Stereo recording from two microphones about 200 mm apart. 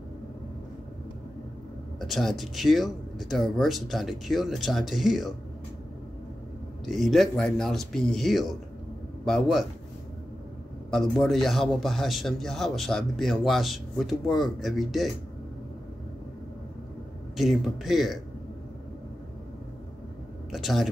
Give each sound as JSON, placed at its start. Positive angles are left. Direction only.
{"t": 2.0, "sound": "a man's voice", "side_deg": 0}
{"t": 6.9, "sound": "a man's voice", "side_deg": 0}
{"t": 10.9, "sound": "a man's voice", "side_deg": 0}
{"t": 17.4, "sound": "a man's voice", "side_deg": 0}
{"t": 20.5, "sound": "speech", "side_deg": 0}